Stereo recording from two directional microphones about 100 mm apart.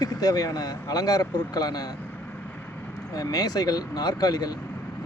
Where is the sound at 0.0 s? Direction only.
40° left (ahead or behind).